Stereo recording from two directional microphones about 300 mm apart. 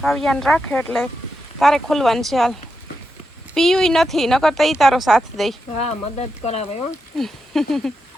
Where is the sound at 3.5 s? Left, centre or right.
Centre.